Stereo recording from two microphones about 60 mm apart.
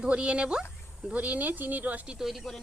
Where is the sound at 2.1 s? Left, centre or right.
Centre.